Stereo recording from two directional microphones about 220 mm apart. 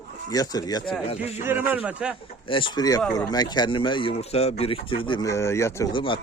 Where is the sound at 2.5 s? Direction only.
20° left (ahead or behind).